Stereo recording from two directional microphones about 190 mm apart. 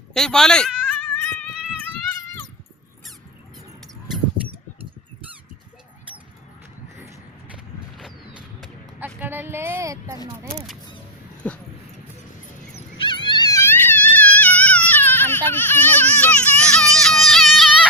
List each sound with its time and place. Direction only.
0.1 s bleat: 5° left (ahead or behind)
7.5 s creak: 5° right (ahead or behind)
8.6 s a sound: 5° right (ahead or behind)
11.4 s dog: 5° left (ahead or behind)
13.0 s a sound: 25° left (ahead or behind); by 16.7 s 5° left (ahead or behind)
17.0 s music: centre (ahead or behind)